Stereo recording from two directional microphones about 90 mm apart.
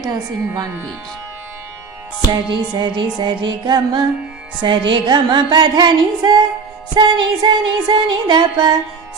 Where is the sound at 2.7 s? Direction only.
55° right (ahead or behind).